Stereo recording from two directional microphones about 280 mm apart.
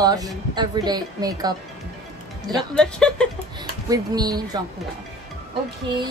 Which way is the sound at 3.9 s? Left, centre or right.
Centre.